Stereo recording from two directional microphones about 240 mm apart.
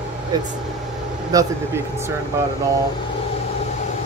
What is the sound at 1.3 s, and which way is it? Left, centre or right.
Speech, centre.